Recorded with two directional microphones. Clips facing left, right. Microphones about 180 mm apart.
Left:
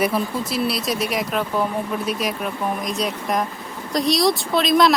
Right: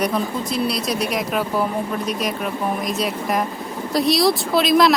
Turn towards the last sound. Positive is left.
turn(degrees=0)  # may be behind; listen again after turning